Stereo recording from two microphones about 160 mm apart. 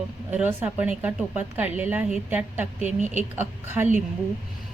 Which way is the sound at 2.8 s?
50° right (ahead or behind).